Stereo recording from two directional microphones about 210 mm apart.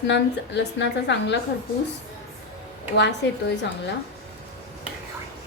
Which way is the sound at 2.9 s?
55° left (ahead or behind).